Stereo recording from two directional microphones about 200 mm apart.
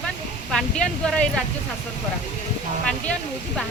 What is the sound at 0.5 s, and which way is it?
Speech, 5° left (ahead or behind).